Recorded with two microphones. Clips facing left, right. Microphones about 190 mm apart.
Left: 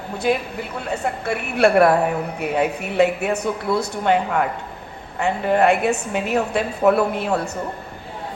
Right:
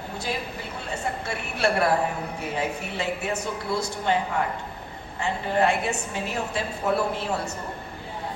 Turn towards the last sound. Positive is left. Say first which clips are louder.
# left 6 dB
turn(degrees=60)  # may be behind; listen again after turning